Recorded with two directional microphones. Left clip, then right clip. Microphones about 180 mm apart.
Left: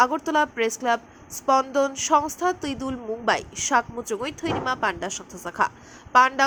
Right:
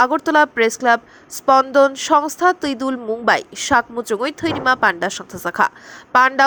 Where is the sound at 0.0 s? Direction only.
20° right (ahead or behind).